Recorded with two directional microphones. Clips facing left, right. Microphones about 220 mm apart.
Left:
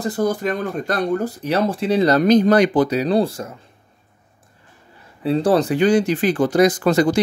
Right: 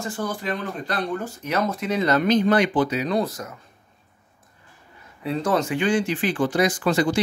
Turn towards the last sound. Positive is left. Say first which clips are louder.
# left 5 dB
turn(degrees=40)  # may be behind; listen again after turning